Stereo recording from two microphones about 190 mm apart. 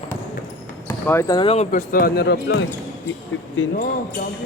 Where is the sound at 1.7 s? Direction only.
50° left (ahead or behind); by 2.7 s 70° left (ahead or behind).